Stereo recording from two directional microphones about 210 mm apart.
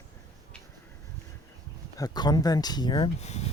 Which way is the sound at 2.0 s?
20° left (ahead or behind).